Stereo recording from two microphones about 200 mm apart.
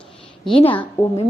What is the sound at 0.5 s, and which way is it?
Speech, 30° left (ahead or behind).